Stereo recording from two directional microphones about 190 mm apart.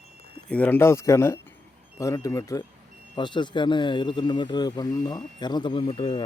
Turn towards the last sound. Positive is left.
turn(degrees=25)  # may be behind; listen again after turning